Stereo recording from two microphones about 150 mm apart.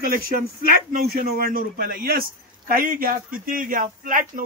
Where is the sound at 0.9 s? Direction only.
65° right (ahead or behind).